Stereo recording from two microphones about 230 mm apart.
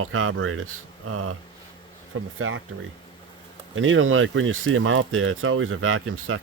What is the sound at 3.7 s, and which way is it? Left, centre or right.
Speech, right.